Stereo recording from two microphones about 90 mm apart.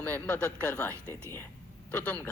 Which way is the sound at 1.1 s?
25° left (ahead or behind).